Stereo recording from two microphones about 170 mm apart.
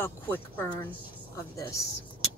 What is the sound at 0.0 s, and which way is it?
Speech, 10° left (ahead or behind).